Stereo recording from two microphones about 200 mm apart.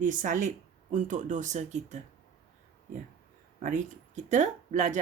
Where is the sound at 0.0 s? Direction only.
40° right (ahead or behind).